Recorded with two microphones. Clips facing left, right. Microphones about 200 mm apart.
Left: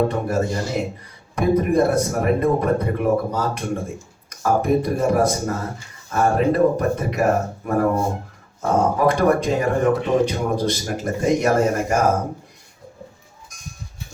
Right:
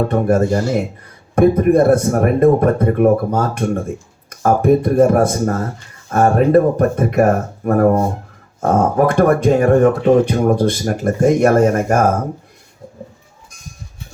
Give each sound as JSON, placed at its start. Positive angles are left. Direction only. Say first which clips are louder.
{"t": 0.1, "sound": "speech", "louder": "right 7 dB", "side_deg": -55}